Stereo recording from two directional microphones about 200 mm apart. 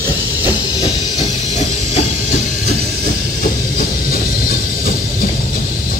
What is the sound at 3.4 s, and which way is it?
Train, 45° left (ahead or behind).